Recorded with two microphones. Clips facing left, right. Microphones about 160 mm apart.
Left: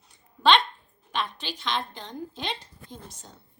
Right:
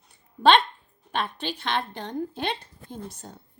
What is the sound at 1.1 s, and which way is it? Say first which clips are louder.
A woman's voice: right 3 dB; 55° right (ahead or behind).